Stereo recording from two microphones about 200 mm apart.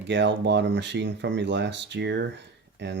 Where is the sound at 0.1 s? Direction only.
60° right (ahead or behind).